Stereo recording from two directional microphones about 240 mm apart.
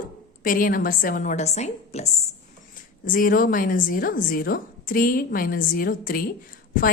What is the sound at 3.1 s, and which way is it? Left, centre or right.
A woman's voice, left.